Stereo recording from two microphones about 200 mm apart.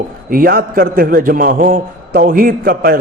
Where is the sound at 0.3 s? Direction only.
45° right (ahead or behind).